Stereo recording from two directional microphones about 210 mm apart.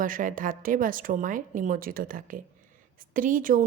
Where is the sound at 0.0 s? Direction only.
40° right (ahead or behind).